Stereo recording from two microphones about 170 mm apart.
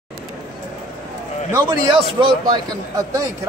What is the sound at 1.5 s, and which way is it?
A man's voice, 25° right (ahead or behind).